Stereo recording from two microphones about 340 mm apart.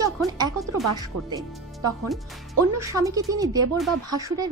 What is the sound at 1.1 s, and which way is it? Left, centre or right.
Speech, right.